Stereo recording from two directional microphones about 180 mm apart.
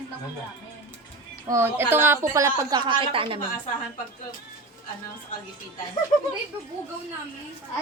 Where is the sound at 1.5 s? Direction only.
10° right (ahead or behind); by 3.4 s 30° right (ahead or behind).